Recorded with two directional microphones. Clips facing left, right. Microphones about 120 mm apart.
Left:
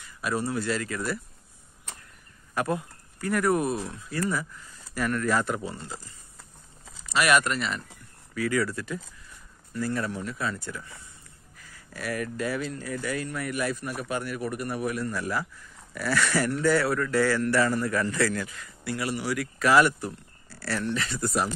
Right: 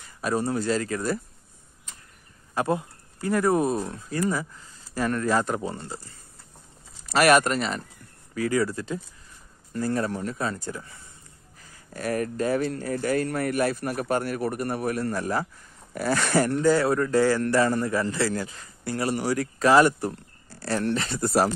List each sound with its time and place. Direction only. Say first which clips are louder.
0.0 s a man's voice: right 3 dB; 35° right (ahead or behind)
2.5 s speech: right 3 dB; 25° right (ahead or behind)
7.1 s a man's voice: right 4 dB; 40° right (ahead or behind)
9.8 s a man's voice: right 3 dB; 40° right (ahead or behind)
11.5 s a sound: right 2 dB; 30° right (ahead or behind)
12.0 s a man's voice: right 4 dB; 40° right (ahead or behind)
16.6 s a man's voice: right 3 dB; 20° right (ahead or behind); by 20.7 s 45° right (ahead or behind)
20.9 s speech: right 5 dB; 30° right (ahead or behind)